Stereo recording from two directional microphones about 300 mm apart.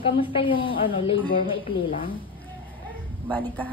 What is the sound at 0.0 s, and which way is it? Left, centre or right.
Speech, centre.